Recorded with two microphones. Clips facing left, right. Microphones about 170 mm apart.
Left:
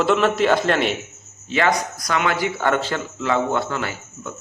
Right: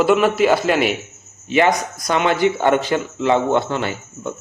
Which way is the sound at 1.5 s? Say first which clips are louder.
Right 4 dB; 20° right (ahead or behind).